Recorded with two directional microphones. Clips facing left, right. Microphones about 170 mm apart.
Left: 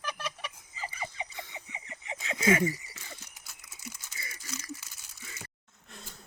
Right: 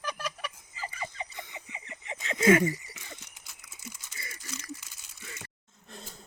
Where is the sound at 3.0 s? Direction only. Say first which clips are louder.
Even; 15° right (ahead or behind).